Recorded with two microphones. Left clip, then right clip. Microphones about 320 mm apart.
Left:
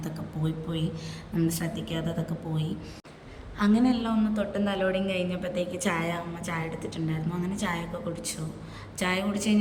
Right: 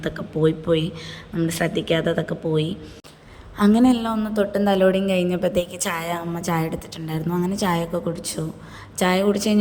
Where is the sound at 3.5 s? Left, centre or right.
Right.